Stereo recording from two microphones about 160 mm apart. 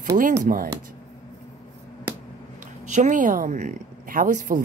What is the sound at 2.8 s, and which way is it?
A woman's voice, 50° right (ahead or behind).